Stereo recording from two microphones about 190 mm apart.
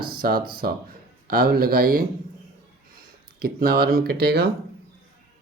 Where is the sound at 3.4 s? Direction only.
55° right (ahead or behind).